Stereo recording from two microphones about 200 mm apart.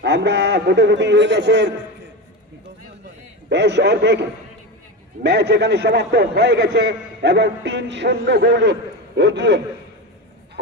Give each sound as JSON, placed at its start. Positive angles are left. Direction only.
{"t": 0.0, "sound": "a man's voice", "side_deg": -60}
{"t": 3.4, "sound": "a man's voice", "side_deg": -60}